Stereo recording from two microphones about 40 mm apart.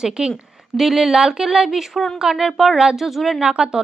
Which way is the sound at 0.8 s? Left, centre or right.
Centre.